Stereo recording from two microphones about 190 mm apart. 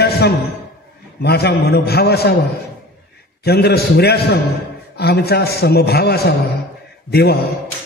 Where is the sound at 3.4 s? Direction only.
55° left (ahead or behind).